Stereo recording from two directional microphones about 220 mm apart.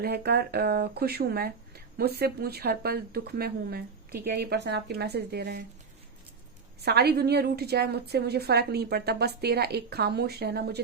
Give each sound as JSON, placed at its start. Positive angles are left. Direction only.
{"t": 0.0, "sound": "speech", "side_deg": -45}
{"t": 6.8, "sound": "speech", "side_deg": -45}